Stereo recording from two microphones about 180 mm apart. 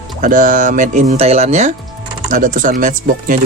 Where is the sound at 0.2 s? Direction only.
50° right (ahead or behind).